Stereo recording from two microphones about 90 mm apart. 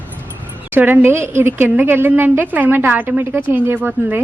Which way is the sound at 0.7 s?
25° right (ahead or behind).